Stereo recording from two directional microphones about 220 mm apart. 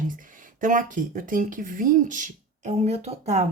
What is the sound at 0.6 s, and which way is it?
Speech, 35° right (ahead or behind).